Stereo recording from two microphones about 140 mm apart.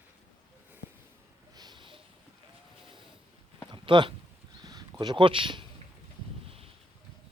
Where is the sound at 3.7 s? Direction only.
35° right (ahead or behind).